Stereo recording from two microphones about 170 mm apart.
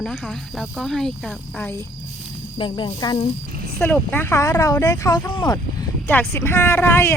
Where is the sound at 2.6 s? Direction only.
30° left (ahead or behind).